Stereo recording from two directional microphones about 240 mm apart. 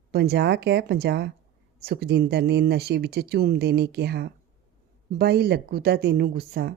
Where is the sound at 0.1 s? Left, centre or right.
Right.